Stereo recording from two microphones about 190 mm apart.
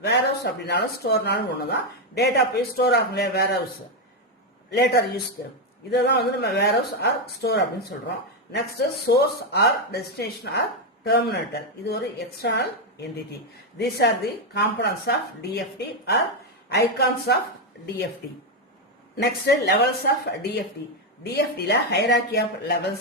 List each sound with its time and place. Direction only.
0.0 s speech: 65° left (ahead or behind)
4.7 s speech: 60° left (ahead or behind)
16.6 s speech: 60° left (ahead or behind)
19.1 s speech: 60° left (ahead or behind)